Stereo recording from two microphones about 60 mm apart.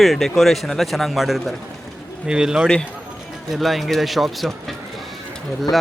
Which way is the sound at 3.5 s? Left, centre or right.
Centre.